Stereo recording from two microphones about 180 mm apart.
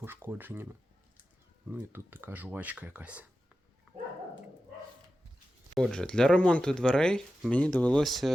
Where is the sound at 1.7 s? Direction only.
10° right (ahead or behind).